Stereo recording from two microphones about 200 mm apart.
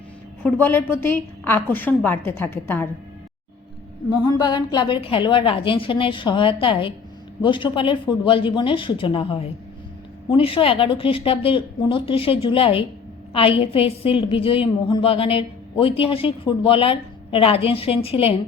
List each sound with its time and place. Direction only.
0.4 s a woman's voice: 10° left (ahead or behind)
4.1 s a woman's voice: 20° left (ahead or behind)